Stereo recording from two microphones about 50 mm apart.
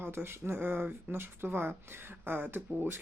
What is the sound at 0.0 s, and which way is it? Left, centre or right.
Speech, right.